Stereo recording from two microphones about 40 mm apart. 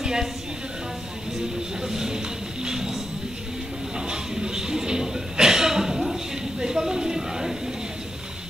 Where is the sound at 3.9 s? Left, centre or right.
Centre.